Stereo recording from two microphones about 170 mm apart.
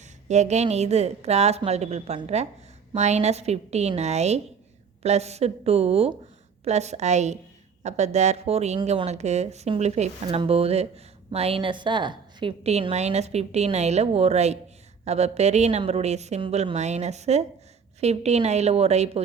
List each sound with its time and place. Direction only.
0.0 s speech: 40° right (ahead or behind)